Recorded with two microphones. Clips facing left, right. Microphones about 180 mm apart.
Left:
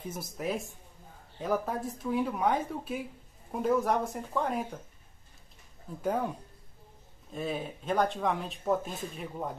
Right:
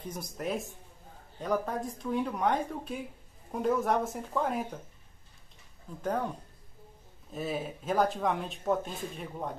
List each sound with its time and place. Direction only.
0.1 s speech: centre (ahead or behind)
6.0 s speech: 10° left (ahead or behind)
7.3 s speech: 5° right (ahead or behind)